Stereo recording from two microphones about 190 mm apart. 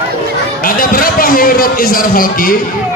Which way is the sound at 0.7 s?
50° left (ahead or behind).